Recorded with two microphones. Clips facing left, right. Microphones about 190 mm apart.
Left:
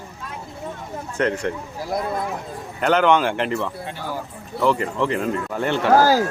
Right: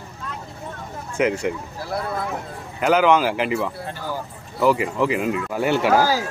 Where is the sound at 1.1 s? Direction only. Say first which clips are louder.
Right 1 dB; 10° right (ahead or behind).